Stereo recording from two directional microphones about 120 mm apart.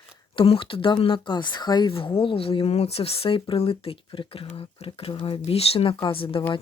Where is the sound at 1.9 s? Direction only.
50° left (ahead or behind).